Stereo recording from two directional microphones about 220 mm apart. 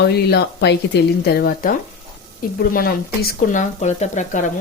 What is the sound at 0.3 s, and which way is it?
Speech, 50° left (ahead or behind).